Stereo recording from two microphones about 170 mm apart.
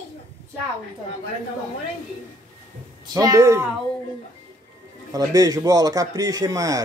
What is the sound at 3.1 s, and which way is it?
Speech, 20° right (ahead or behind).